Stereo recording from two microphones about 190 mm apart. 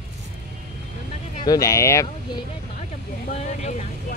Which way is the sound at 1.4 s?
15° left (ahead or behind).